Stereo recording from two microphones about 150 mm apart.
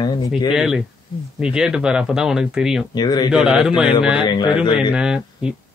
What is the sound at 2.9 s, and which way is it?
Speech, 30° left (ahead or behind).